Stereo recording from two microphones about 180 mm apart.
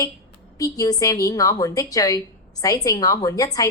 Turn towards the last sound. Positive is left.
turn(degrees=20)  # may be behind; listen again after turning